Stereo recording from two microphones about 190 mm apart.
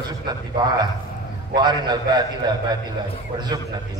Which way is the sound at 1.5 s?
20° right (ahead or behind).